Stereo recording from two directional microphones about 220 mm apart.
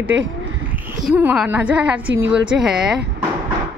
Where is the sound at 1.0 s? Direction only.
5° right (ahead or behind).